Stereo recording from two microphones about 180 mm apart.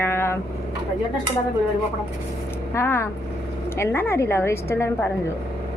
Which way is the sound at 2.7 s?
15° left (ahead or behind).